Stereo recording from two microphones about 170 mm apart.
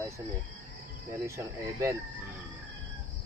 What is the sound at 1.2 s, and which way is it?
Speech, 15° right (ahead or behind).